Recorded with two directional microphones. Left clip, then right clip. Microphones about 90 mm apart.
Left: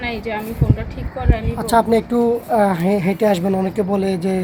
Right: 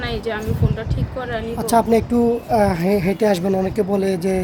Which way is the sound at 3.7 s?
20° right (ahead or behind).